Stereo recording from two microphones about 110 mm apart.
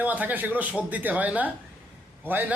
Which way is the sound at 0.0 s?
15° right (ahead or behind).